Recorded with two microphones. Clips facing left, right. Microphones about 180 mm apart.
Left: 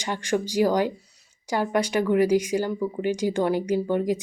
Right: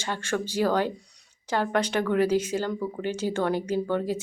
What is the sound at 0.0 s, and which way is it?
Speech, 15° left (ahead or behind).